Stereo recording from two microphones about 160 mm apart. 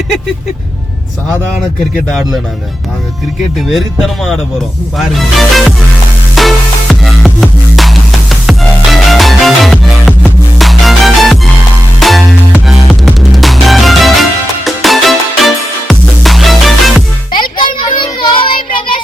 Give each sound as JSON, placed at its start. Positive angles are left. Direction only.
{"t": 3.7, "sound": "music", "side_deg": 0}
{"t": 17.3, "sound": "child singing", "side_deg": 30}